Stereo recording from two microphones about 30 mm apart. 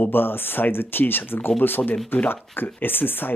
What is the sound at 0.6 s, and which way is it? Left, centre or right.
Speech, left.